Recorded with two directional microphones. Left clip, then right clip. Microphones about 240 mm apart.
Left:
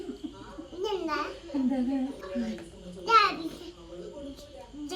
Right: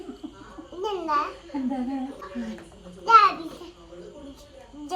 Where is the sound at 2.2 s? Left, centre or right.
Centre.